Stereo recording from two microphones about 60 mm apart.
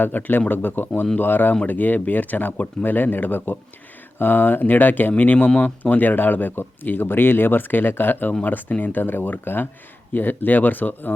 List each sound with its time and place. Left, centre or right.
0.0 s speech: left